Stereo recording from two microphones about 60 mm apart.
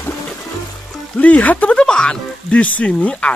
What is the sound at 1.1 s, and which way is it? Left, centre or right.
Speech, left.